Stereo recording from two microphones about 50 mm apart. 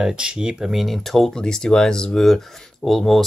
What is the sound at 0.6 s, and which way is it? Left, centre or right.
Speech, centre.